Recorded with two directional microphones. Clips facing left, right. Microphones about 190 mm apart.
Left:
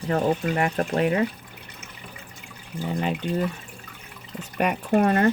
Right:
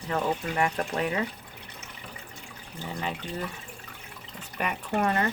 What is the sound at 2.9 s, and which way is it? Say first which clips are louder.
Speech: left 7 dB; 30° left (ahead or behind).